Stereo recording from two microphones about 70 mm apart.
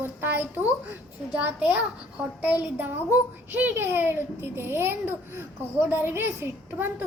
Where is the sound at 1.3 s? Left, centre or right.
Centre.